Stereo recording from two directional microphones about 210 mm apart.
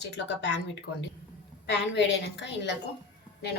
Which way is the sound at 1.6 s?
55° left (ahead or behind).